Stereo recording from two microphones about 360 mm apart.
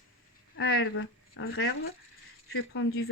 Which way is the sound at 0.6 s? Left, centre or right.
Left.